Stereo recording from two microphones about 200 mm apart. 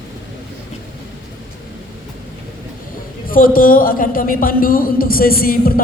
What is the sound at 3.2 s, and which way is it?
A woman's voice, 45° left (ahead or behind).